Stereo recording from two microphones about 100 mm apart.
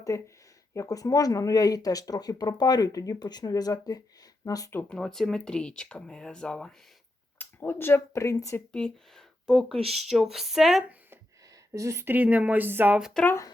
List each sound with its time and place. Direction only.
0.1 s speech: 30° left (ahead or behind)
4.9 s speech: 5° left (ahead or behind)
7.3 s speech: 20° left (ahead or behind)
8.7 s speech: 5° left (ahead or behind)
9.8 s speech: 90° right
10.1 s speech: 5° right (ahead or behind)
11.7 s speech: 30° right (ahead or behind)
12.1 s speech: 15° right (ahead or behind)
13.0 s speech: centre (ahead or behind)
13.2 s speech: 30° left (ahead or behind)